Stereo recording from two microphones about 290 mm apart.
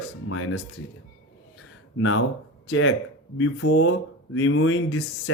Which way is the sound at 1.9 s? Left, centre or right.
Left.